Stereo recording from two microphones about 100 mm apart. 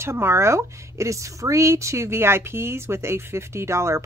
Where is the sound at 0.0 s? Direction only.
25° right (ahead or behind).